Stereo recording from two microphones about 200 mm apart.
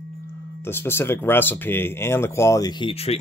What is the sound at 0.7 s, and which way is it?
Speech, 10° left (ahead or behind).